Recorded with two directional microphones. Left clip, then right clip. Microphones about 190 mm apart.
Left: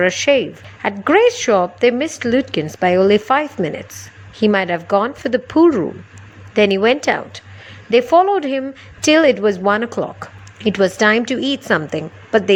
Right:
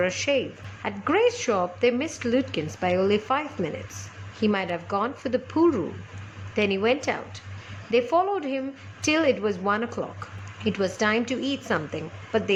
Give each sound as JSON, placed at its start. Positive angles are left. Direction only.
{"t": 0.0, "sound": "a woman's voice", "side_deg": 35}